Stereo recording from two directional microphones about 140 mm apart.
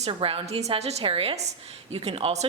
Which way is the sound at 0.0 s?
40° right (ahead or behind).